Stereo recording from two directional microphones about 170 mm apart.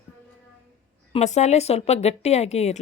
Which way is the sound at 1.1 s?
40° left (ahead or behind).